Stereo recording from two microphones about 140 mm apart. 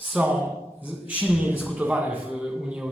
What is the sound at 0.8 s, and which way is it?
A man's voice, 10° right (ahead or behind).